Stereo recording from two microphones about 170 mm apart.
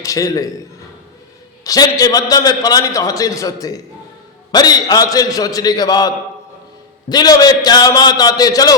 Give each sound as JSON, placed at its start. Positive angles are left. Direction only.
{"t": 0.0, "sound": "a man's voice", "side_deg": 20}
{"t": 1.6, "sound": "a man's voice", "side_deg": 20}